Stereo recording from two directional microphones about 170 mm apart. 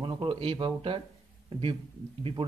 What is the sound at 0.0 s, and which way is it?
Speech, 30° right (ahead or behind).